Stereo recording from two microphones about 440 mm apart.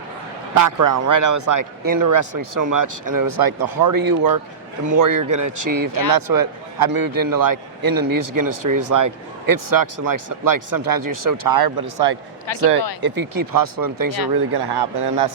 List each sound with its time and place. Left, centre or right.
0.6 s a man's voice: right
14.5 s speech: right